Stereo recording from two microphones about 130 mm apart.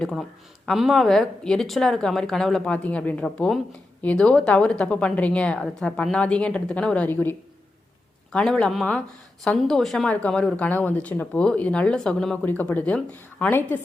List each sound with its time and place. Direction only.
0.0 s a woman's voice: centre (ahead or behind)